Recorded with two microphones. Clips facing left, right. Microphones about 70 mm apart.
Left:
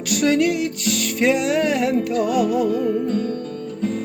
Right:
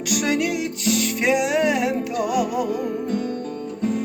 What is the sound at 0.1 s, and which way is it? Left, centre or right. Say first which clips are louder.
Music: left 4 dB; centre.